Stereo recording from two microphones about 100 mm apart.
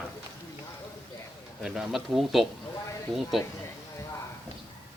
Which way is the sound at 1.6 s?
5° right (ahead or behind).